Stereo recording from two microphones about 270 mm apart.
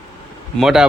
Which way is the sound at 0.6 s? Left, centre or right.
Centre.